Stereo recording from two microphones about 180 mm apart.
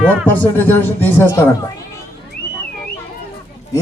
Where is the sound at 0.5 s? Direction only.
10° left (ahead or behind).